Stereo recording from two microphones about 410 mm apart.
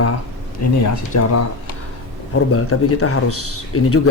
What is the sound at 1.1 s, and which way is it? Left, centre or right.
Speech, left.